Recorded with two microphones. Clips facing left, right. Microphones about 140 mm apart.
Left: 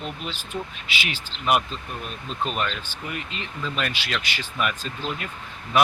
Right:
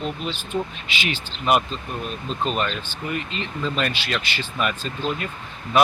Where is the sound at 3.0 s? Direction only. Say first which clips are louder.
Right 6 dB; 10° left (ahead or behind).